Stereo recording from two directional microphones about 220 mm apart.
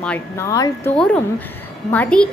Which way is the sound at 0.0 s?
10° left (ahead or behind).